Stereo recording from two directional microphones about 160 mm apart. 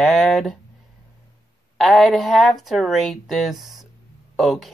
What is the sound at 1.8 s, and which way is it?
Speech, centre (ahead or behind).